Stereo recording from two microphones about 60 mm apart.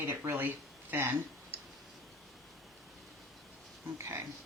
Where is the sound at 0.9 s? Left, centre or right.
Right.